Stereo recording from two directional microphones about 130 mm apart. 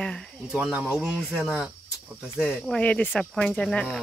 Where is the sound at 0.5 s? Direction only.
10° right (ahead or behind).